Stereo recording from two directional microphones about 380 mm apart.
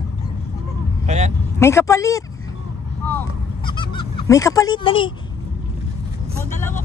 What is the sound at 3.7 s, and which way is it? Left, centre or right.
Honk, centre.